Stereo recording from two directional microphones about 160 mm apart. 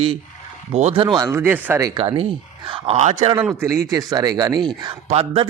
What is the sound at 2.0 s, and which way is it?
Speech, 35° right (ahead or behind).